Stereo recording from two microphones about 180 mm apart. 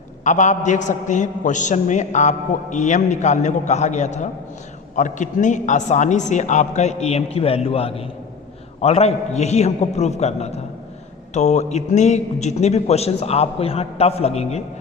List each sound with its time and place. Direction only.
0.3 s a man's voice: 45° left (ahead or behind)